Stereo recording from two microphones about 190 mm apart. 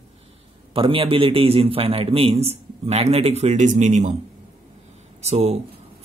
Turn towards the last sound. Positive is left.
turn(degrees=-35)  # may be behind; listen again after turning